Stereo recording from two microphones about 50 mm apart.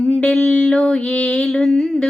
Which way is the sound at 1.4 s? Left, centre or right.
Centre.